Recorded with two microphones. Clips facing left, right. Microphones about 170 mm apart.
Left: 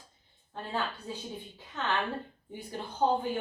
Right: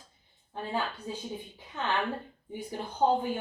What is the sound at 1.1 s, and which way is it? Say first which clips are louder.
Speech: right 2 dB; 15° right (ahead or behind).